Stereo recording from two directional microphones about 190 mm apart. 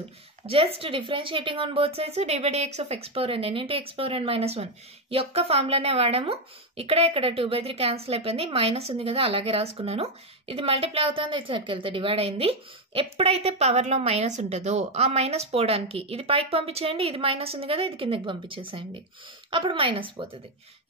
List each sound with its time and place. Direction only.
0.5 s a woman's voice: 30° right (ahead or behind)